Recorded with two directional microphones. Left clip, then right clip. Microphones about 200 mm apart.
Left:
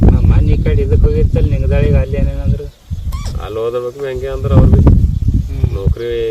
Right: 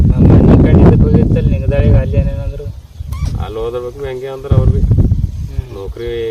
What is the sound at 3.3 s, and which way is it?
Speech, 15° right (ahead or behind).